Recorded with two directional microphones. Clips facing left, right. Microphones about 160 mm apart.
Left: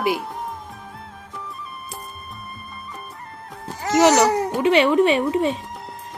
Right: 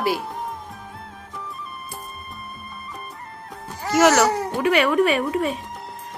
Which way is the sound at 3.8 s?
20° left (ahead or behind).